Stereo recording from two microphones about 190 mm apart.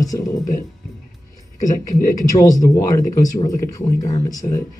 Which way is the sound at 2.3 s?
20° left (ahead or behind).